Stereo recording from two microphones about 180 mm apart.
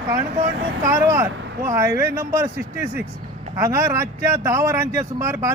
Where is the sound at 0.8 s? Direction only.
15° right (ahead or behind).